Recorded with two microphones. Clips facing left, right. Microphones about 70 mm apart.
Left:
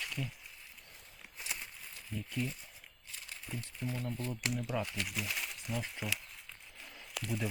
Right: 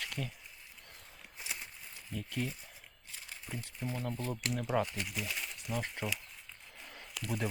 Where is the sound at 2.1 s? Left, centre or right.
Right.